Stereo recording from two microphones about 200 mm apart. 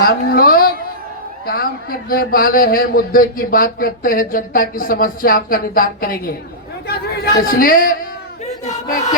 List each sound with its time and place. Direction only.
0.0 s a woman's voice: 50° left (ahead or behind)